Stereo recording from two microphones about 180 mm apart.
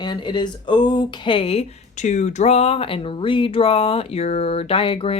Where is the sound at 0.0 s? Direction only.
25° left (ahead or behind).